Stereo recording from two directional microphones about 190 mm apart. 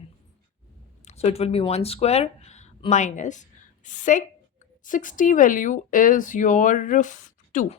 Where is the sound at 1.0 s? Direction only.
35° left (ahead or behind).